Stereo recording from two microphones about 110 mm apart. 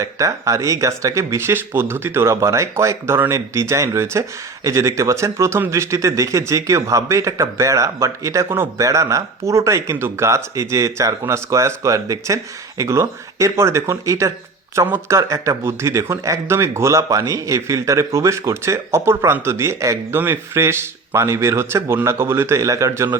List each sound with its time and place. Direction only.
0.0 s speech: 30° right (ahead or behind)